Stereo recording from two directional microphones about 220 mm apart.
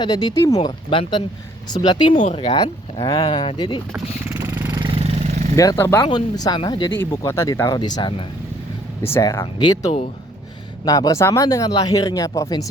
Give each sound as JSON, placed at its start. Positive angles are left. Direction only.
{"t": 0.0, "sound": "speech", "side_deg": 20}
{"t": 2.1, "sound": "speech", "side_deg": 30}
{"t": 4.3, "sound": "vehicle", "side_deg": -10}
{"t": 5.5, "sound": "speech", "side_deg": 15}
{"t": 9.1, "sound": "speech", "side_deg": 15}